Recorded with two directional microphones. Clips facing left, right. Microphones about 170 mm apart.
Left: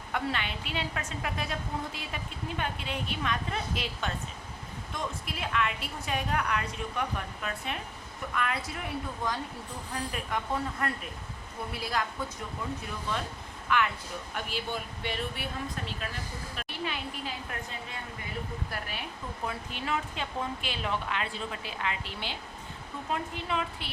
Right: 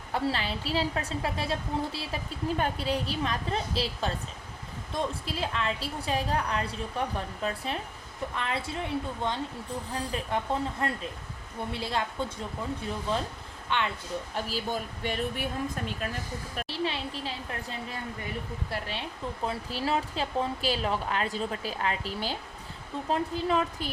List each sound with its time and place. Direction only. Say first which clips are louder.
0.1 s a woman's voice: right 3 dB; 30° right (ahead or behind)
16.6 s a woman's voice: right 4 dB; 30° right (ahead or behind)
18.7 s a woman's voice: right 3 dB; 30° right (ahead or behind)